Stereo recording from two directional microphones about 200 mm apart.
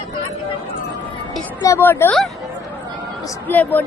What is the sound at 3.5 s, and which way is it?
Speech, 10° left (ahead or behind).